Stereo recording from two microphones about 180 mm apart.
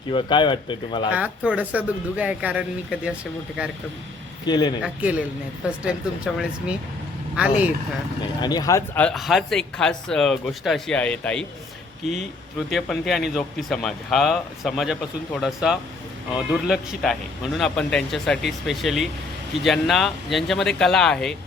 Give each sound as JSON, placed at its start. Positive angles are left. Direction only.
{"t": 0.1, "sound": "speech", "side_deg": 25}
{"t": 1.1, "sound": "speech", "side_deg": -10}
{"t": 4.4, "sound": "speech", "side_deg": 25}
{"t": 4.8, "sound": "speech", "side_deg": -10}
{"t": 8.4, "sound": "speech", "side_deg": 20}
{"t": 9.0, "sound": "speech", "side_deg": 5}
{"t": 12.7, "sound": "speech", "side_deg": 0}